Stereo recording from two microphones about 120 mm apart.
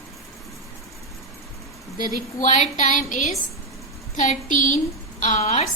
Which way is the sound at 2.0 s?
90° left.